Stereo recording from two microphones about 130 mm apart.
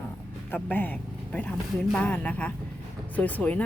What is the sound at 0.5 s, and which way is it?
A woman's voice, 15° left (ahead or behind).